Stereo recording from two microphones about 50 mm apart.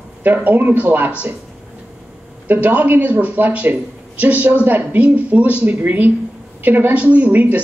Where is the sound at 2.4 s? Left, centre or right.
Right.